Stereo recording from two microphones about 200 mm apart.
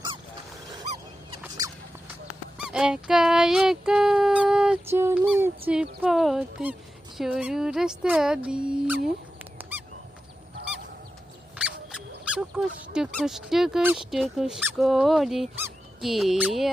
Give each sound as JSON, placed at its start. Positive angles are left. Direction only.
{"t": 1.4, "sound": "rodents", "side_deg": -15}
{"t": 2.6, "sound": "speech", "side_deg": -5}
{"t": 9.6, "sound": "a sound", "side_deg": -10}
{"t": 11.5, "sound": "squeak", "side_deg": -5}
{"t": 12.9, "sound": "speech", "side_deg": -5}